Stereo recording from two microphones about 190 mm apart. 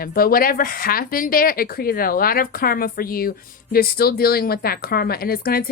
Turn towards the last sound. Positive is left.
turn(degrees=50)  # may be behind; listen again after turning